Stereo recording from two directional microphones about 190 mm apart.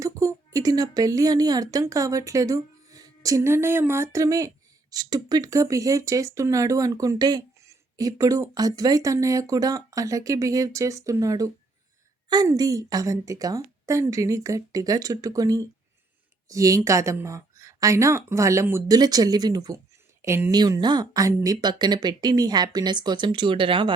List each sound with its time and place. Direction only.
0.0 s speech: 15° right (ahead or behind)